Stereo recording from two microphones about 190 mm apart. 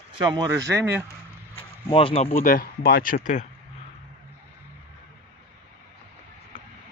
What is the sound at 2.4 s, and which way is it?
Speech, 50° left (ahead or behind).